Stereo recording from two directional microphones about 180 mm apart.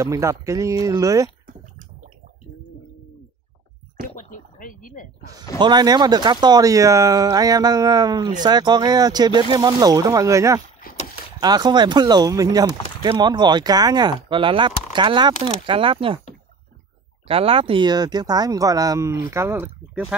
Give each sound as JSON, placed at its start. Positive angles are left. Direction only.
{"t": 0.0, "sound": "speech", "side_deg": -15}
{"t": 4.1, "sound": "a sound", "side_deg": 45}
{"t": 5.6, "sound": "speech", "side_deg": -25}
{"t": 17.3, "sound": "speech", "side_deg": -30}